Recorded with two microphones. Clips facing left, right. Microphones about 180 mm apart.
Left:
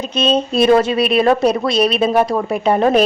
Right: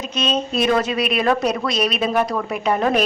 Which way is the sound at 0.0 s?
30° left (ahead or behind).